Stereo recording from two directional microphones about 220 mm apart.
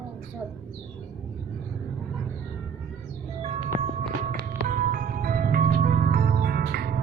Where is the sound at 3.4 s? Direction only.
25° right (ahead or behind).